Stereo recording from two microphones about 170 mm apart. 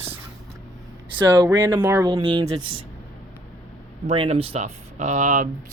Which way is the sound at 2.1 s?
30° right (ahead or behind).